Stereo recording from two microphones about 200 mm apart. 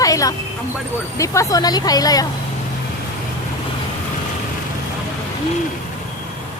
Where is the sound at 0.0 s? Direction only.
15° left (ahead or behind).